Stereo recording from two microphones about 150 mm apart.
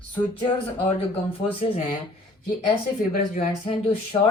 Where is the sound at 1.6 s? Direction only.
40° left (ahead or behind).